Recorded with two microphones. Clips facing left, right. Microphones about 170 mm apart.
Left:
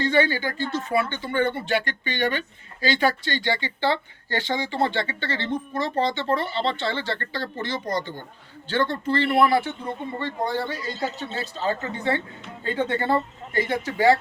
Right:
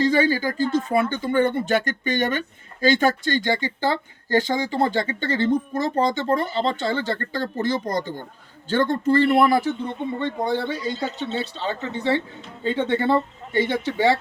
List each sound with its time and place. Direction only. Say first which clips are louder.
0.0 s speech: right 3 dB; 40° right (ahead or behind)
10.2 s speech: right 2 dB; 20° right (ahead or behind)